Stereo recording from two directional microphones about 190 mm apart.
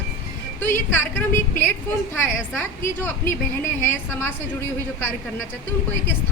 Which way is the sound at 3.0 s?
15° left (ahead or behind).